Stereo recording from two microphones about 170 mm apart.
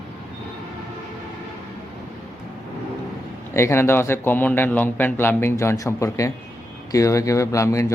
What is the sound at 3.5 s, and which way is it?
A man's voice, 15° left (ahead or behind).